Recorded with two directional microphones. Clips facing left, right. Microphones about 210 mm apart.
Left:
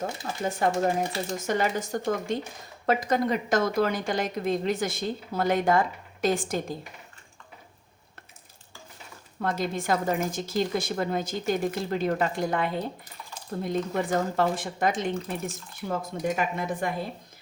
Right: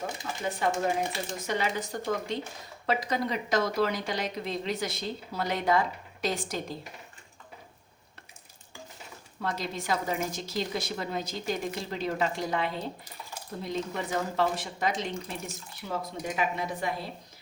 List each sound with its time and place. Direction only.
0.6 s a woman's voice: 45° left (ahead or behind)
9.4 s a woman's voice: 50° left (ahead or behind)